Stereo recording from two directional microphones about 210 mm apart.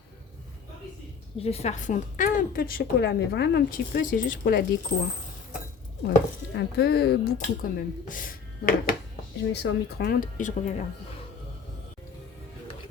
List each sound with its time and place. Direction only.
1.4 s a woman's voice: 30° left (ahead or behind)
6.1 s chopping: 50° left (ahead or behind)
9.5 s a woman's voice: 50° left (ahead or behind)